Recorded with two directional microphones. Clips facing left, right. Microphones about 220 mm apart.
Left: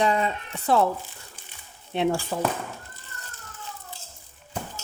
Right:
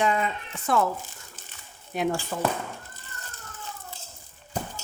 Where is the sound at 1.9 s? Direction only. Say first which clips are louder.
Left 3 dB; 30° left (ahead or behind).